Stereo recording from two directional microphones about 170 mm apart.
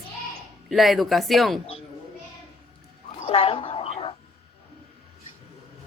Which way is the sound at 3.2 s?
35° left (ahead or behind).